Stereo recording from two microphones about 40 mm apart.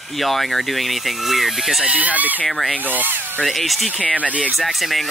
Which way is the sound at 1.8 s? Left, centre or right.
Right.